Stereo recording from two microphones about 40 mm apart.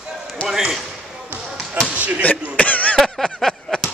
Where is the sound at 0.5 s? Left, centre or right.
Centre.